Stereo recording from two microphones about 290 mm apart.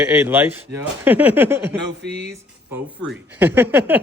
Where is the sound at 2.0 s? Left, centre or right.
Right.